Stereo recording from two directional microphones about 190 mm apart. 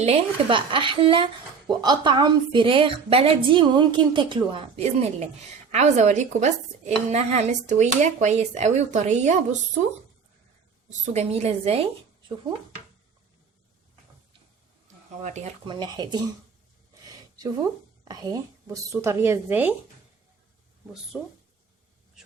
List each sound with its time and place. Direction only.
0.0 s speech: 30° right (ahead or behind)
10.8 s speech: 40° right (ahead or behind)
15.6 s speech: 25° right (ahead or behind)
18.1 s a woman's voice: 20° right (ahead or behind)
21.1 s speech: centre (ahead or behind)